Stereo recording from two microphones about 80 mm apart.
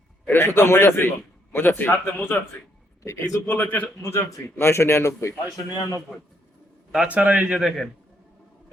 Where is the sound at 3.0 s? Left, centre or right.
Left.